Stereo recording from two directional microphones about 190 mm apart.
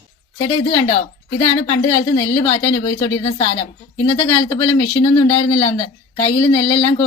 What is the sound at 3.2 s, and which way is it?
Speech, 30° left (ahead or behind).